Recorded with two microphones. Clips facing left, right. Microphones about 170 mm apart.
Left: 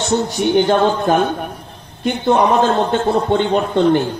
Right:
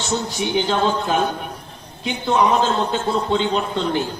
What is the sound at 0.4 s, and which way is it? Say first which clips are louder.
A man's voice: left 6 dB; 60° left (ahead or behind).